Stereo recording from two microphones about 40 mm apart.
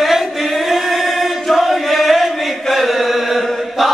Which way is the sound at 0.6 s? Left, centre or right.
Centre.